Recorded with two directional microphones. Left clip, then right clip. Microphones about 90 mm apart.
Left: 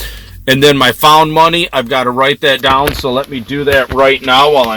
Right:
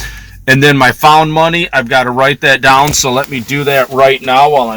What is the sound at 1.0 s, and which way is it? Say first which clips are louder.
Speech: even; 50° left (ahead or behind).